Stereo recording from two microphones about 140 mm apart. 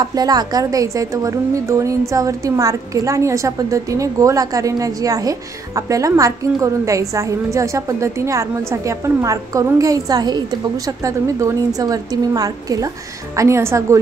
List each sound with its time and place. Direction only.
0.0 s a woman's voice: 25° right (ahead or behind)